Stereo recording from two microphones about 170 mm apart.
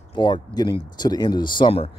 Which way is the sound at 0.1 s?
25° left (ahead or behind).